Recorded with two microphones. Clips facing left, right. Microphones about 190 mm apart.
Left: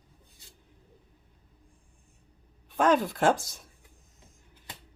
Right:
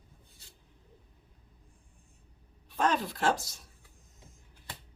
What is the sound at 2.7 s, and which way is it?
Speech, 50° left (ahead or behind).